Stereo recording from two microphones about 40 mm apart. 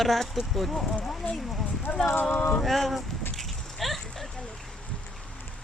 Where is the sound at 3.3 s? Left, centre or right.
Centre.